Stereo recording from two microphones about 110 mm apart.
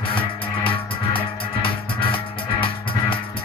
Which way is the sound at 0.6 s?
50° left (ahead or behind).